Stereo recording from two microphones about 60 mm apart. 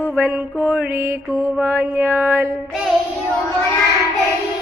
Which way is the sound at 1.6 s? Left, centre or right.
Right.